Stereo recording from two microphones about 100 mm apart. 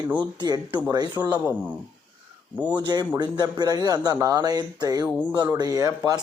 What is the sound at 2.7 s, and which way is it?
Speech, 45° right (ahead or behind).